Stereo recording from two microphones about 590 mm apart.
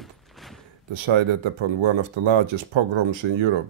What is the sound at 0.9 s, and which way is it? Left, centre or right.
Speech, right.